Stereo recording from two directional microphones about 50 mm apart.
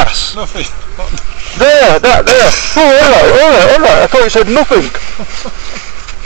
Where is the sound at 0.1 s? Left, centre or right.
Right.